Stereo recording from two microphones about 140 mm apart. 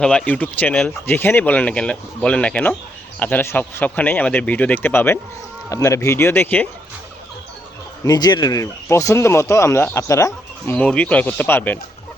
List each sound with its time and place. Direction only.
0.0 s speech: 5° left (ahead or behind)
8.0 s speech: 30° left (ahead or behind)
10.8 s speech: 10° left (ahead or behind)